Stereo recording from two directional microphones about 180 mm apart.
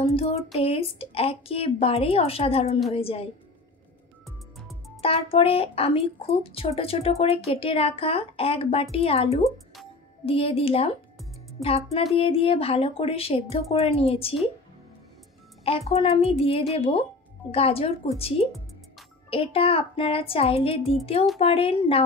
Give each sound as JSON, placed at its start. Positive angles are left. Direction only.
{"t": 0.0, "sound": "speech", "side_deg": 35}
{"t": 4.6, "sound": "music", "side_deg": 0}
{"t": 5.0, "sound": "speech", "side_deg": 30}
{"t": 15.6, "sound": "speech", "side_deg": 35}